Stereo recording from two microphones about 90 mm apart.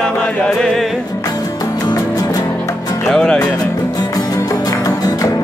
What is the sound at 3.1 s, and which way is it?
Music, 10° left (ahead or behind).